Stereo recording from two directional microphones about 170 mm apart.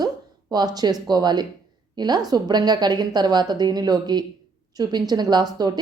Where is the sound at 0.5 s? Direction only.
25° right (ahead or behind).